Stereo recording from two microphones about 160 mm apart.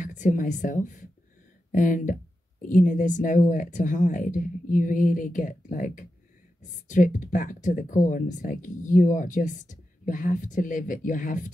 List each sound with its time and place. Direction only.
0.0 s a woman's voice: 50° left (ahead or behind)